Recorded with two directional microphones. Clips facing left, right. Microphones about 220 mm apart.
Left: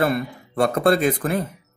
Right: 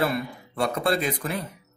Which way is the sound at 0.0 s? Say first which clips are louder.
Left 4 dB; 50° left (ahead or behind).